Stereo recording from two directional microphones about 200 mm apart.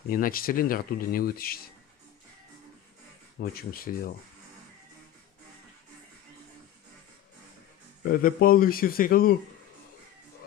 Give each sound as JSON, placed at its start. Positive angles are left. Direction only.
{"t": 0.1, "sound": "speech", "side_deg": 45}
{"t": 3.3, "sound": "speech", "side_deg": 50}
{"t": 8.0, "sound": "speech", "side_deg": 50}